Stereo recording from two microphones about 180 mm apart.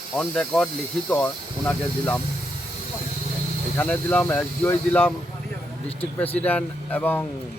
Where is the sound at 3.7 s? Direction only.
10° left (ahead or behind).